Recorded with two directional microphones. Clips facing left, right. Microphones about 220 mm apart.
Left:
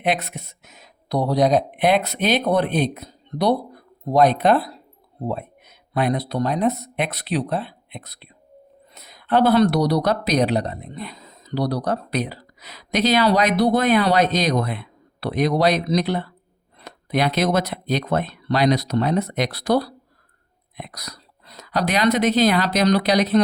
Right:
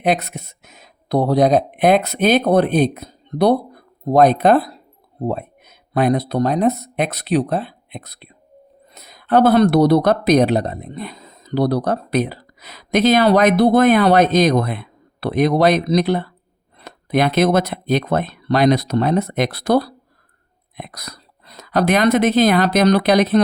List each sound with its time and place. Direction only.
0.0 s speech: 40° right (ahead or behind)